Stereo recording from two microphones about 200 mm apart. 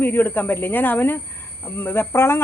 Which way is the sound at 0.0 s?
10° left (ahead or behind).